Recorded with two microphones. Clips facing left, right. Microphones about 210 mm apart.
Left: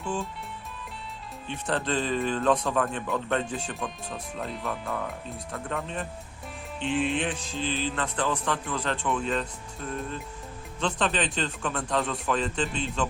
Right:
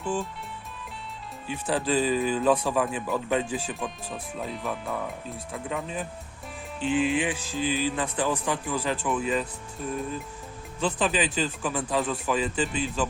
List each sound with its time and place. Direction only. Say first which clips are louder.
0.0 s speech: right 2 dB; centre (ahead or behind)
1.5 s speech: right 2 dB; 5° right (ahead or behind)